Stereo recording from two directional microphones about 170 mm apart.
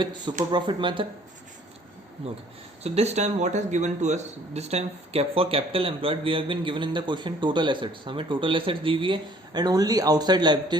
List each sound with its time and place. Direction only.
0.0 s speech: 25° right (ahead or behind)
2.8 s a man's voice: 40° right (ahead or behind)